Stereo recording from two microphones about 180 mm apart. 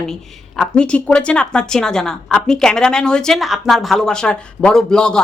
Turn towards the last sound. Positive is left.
turn(degrees=5)  # may be behind; listen again after turning